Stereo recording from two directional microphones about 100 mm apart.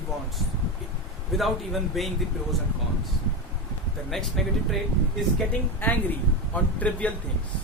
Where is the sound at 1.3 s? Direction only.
Centre (ahead or behind).